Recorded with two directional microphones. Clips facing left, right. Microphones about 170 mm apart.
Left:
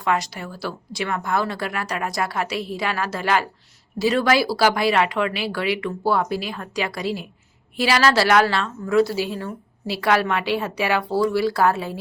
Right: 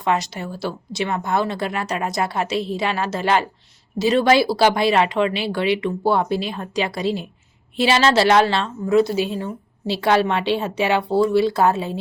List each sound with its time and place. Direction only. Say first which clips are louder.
0.0 s a woman's voice: right 2 dB; 25° right (ahead or behind)